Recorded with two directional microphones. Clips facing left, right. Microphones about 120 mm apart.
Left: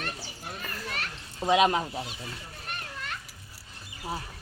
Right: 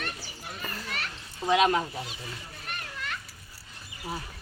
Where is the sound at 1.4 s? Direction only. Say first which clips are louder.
Even; 20° left (ahead or behind).